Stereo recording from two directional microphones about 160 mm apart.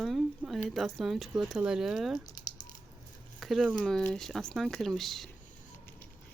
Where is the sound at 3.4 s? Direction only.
Centre (ahead or behind).